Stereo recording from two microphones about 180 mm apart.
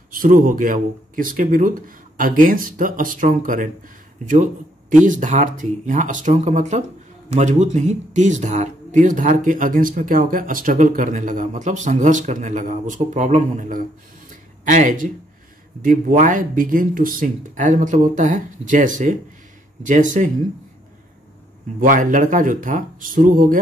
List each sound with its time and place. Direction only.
0.1 s speech: 50° right (ahead or behind)
4.9 s speech: 45° right (ahead or behind)
14.3 s a sound: 45° right (ahead or behind)
15.8 s speech: 45° right (ahead or behind)
21.7 s speech: 50° right (ahead or behind)